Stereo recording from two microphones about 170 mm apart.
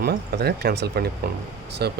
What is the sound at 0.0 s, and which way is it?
Speech, 70° right (ahead or behind).